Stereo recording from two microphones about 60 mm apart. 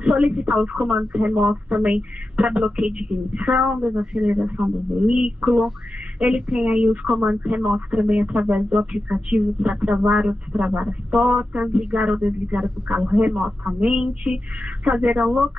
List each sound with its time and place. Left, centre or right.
0.0 s speech: centre
4.0 s speech: centre